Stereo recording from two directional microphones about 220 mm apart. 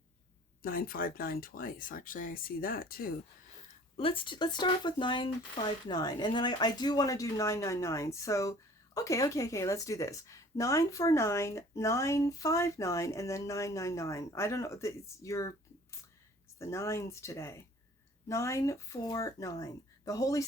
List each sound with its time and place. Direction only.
0.6 s speech: 40° left (ahead or behind)
3.9 s a woman's voice: 25° left (ahead or behind)